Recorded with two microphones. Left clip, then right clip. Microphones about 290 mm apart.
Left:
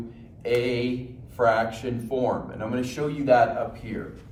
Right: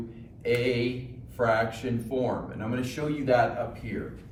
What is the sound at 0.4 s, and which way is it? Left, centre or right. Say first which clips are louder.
A man's voice: left 2 dB; centre.